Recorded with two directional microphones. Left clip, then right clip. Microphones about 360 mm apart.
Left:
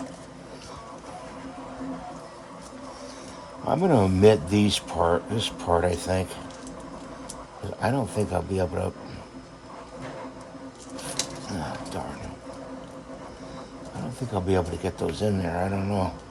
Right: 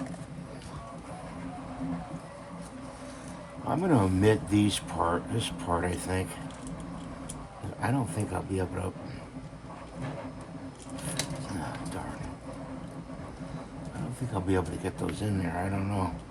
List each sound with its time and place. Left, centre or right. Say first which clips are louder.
3.7 s speech: left 5 dB; left
7.8 s speech: left 6 dB; left
14.3 s speech: left 5 dB; left